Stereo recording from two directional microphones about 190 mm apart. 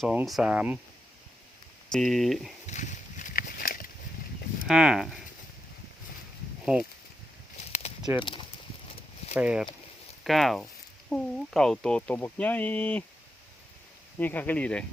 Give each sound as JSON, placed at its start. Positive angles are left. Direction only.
{"t": 0.0, "sound": "speech", "side_deg": -5}
{"t": 1.9, "sound": "speech", "side_deg": 0}
{"t": 2.6, "sound": "a sound", "side_deg": 40}
{"t": 4.7, "sound": "speech", "side_deg": -5}
{"t": 6.7, "sound": "speech", "side_deg": -10}
{"t": 7.7, "sound": "a sound", "side_deg": 35}
{"t": 9.3, "sound": "speech", "side_deg": -5}
{"t": 14.2, "sound": "speech", "side_deg": 10}